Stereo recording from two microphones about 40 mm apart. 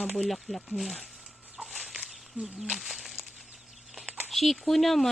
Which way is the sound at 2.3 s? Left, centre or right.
Right.